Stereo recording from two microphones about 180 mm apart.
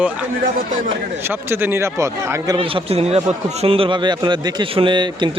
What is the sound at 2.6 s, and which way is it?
A man's voice, 30° right (ahead or behind).